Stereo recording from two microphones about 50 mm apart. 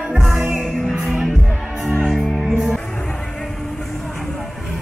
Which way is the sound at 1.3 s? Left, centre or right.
Centre.